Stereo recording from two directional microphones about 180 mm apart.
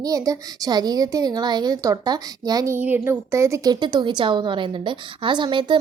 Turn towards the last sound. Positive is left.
turn(degrees=-25)  # may be behind; listen again after turning